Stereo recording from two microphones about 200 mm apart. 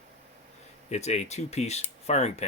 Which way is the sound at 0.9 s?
35° left (ahead or behind).